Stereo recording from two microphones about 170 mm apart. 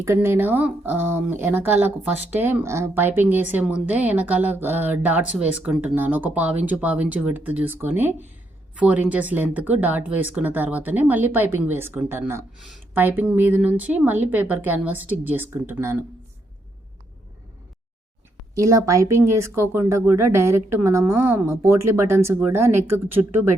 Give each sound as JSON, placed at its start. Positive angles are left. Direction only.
{"t": 0.0, "sound": "speech", "side_deg": -15}
{"t": 18.5, "sound": "speech", "side_deg": -20}